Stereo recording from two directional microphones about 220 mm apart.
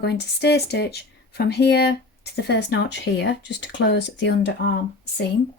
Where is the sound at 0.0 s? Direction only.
50° left (ahead or behind).